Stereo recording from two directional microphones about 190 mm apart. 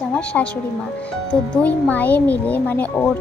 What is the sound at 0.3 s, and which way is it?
Speech, 5° left (ahead or behind).